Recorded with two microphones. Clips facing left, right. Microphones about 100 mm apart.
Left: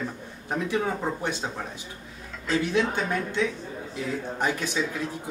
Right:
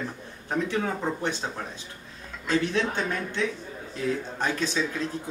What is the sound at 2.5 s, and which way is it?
Speech, 15° left (ahead or behind).